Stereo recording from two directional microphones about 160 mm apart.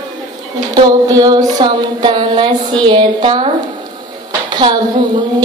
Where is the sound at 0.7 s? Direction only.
25° right (ahead or behind).